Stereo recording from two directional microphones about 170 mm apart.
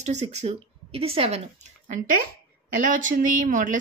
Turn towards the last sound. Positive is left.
turn(degrees=-50)  # may be behind; listen again after turning